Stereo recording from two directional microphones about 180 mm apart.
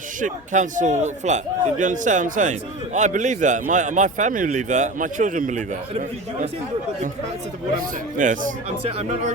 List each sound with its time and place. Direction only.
0.2 s a man's voice: 45° right (ahead or behind)
8.2 s a man's voice: 45° right (ahead or behind)